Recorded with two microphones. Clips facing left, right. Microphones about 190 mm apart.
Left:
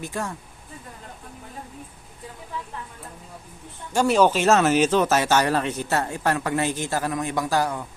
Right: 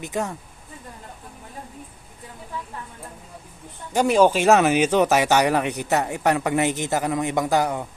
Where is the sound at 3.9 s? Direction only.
15° right (ahead or behind).